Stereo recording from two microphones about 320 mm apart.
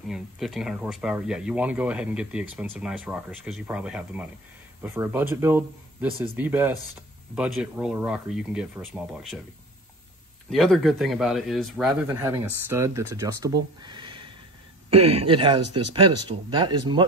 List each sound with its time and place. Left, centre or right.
0.1 s speech: centre
10.5 s speech: centre